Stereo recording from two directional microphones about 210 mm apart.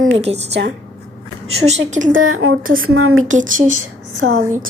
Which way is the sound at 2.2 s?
80° right.